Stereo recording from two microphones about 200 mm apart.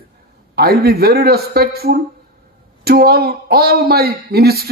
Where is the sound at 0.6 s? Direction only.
50° right (ahead or behind).